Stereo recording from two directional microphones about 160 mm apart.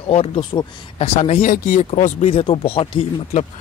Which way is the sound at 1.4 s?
60° left (ahead or behind).